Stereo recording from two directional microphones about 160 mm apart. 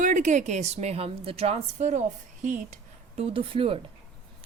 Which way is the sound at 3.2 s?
35° right (ahead or behind).